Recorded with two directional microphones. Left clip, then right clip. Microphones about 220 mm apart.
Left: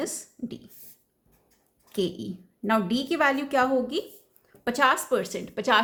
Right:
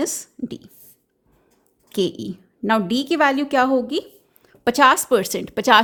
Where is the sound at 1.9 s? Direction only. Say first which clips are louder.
Right 6 dB; 40° right (ahead or behind).